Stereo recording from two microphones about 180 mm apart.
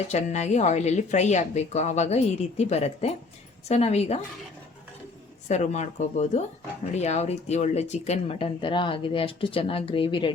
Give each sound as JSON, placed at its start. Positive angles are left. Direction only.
{"t": 0.1, "sound": "speech", "side_deg": 40}
{"t": 5.5, "sound": "speech", "side_deg": 40}